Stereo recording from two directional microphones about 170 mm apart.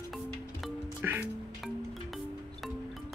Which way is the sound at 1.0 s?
10° right (ahead or behind).